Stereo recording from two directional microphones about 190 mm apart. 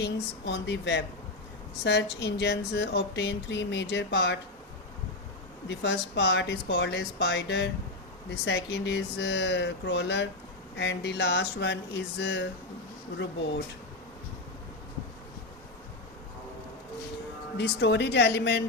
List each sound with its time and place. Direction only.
0.0 s speech: 65° left (ahead or behind)
5.6 s speech: 70° left (ahead or behind)
17.6 s speech: 65° left (ahead or behind)